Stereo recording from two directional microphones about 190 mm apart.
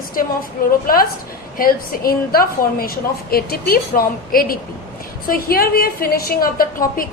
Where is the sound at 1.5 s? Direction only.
50° left (ahead or behind).